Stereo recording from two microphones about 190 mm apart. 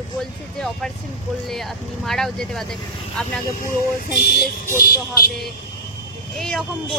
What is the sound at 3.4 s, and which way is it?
Speech, 50° left (ahead or behind).